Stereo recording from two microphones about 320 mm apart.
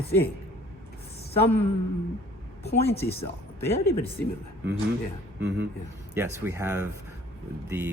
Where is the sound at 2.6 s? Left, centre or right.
Centre.